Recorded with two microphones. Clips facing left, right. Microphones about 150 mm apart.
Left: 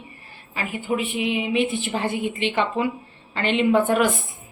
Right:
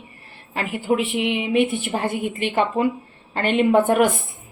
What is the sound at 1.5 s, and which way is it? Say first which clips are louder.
A woman's voice: right 3 dB; 55° right (ahead or behind).